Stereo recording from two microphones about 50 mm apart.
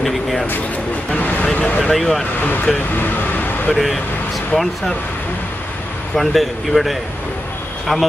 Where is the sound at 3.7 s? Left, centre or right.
Centre.